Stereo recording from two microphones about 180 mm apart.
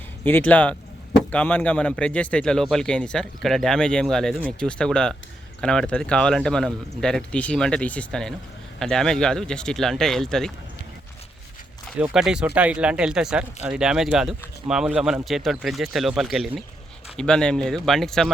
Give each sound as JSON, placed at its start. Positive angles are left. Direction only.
{"t": 0.3, "sound": "speech", "side_deg": 10}
{"t": 11.9, "sound": "speech", "side_deg": -5}